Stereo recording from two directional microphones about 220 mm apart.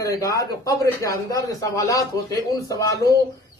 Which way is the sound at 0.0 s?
15° left (ahead or behind).